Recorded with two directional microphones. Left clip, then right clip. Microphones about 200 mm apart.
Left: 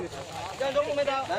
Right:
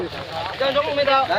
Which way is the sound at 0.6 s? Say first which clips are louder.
Right 7 dB; 15° right (ahead or behind).